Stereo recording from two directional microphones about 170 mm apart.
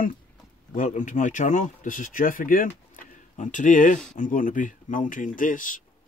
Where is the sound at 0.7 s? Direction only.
50° left (ahead or behind).